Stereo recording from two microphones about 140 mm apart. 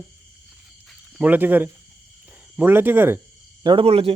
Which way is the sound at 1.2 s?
15° right (ahead or behind).